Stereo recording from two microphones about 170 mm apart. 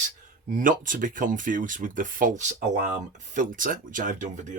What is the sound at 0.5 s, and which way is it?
Speech, 50° right (ahead or behind).